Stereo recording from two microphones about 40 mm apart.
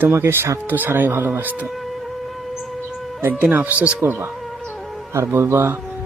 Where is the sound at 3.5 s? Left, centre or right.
Right.